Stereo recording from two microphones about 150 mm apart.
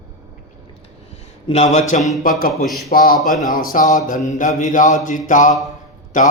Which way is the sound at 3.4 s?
70° left (ahead or behind).